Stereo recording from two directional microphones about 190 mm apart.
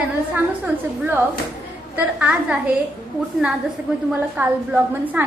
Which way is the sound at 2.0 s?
5° right (ahead or behind).